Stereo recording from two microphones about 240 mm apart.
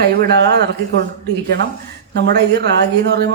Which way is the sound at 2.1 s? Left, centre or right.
Right.